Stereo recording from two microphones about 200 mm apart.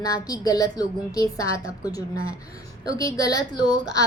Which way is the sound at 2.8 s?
15° left (ahead or behind).